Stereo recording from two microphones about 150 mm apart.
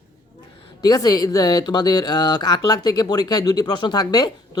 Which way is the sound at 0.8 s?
25° left (ahead or behind).